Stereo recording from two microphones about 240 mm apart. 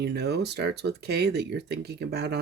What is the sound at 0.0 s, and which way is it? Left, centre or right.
Speech, right.